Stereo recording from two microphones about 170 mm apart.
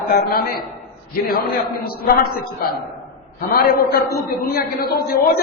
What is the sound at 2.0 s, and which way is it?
A man's voice, 65° left (ahead or behind).